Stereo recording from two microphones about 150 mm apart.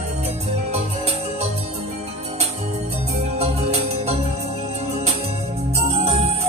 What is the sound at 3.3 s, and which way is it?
Music, 45° right (ahead or behind).